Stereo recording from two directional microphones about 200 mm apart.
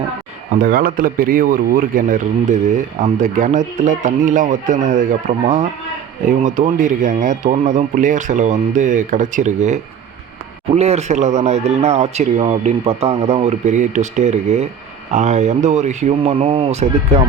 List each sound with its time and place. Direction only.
0.5 s speech: 45° right (ahead or behind)